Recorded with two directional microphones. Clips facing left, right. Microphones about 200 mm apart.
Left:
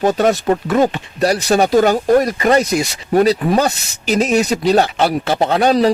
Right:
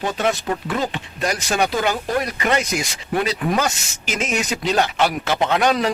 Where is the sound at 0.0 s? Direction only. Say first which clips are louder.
Left 8 dB; 40° left (ahead or behind).